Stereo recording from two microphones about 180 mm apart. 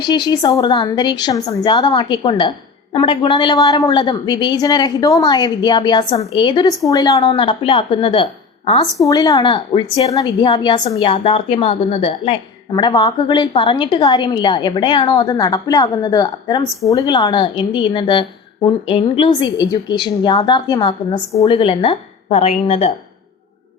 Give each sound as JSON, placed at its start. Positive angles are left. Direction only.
{"t": 0.0, "sound": "a woman's voice", "side_deg": 25}